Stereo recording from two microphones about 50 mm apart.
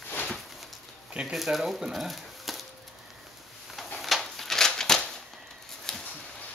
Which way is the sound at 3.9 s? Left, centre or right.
Centre.